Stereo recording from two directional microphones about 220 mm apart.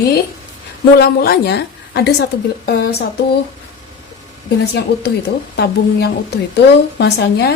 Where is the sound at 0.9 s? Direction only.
45° left (ahead or behind).